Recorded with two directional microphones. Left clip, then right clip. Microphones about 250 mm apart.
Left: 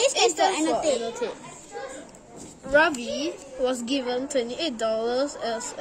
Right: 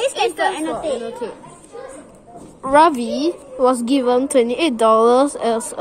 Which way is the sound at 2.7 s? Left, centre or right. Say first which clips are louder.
Right 8 dB; right.